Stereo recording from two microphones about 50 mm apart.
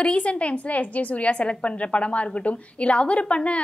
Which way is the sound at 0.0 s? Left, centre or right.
Left.